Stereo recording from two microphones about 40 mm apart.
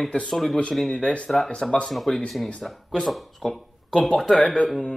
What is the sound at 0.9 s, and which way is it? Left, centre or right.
Speech, left.